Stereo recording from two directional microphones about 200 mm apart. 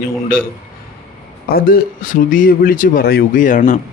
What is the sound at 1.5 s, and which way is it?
Speech, 45° left (ahead or behind).